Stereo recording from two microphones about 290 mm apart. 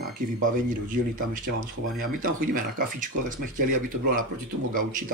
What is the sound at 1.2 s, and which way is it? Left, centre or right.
Speech, right.